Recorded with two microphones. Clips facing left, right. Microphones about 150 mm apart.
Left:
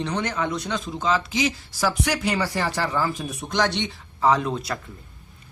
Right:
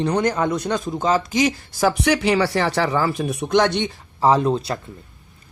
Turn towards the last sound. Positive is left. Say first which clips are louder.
# right 4 dB
turn(degrees=-30)  # may be behind; listen again after turning